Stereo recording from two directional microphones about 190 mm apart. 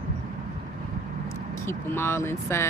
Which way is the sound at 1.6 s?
10° left (ahead or behind).